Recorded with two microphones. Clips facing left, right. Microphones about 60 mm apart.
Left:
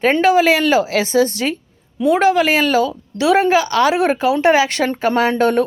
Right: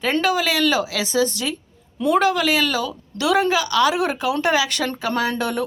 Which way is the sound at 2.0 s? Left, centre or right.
Centre.